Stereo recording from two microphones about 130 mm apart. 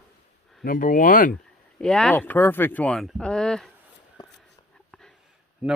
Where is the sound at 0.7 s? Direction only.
90° left.